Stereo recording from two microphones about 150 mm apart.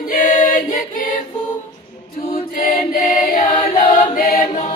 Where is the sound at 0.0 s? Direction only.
60° left (ahead or behind).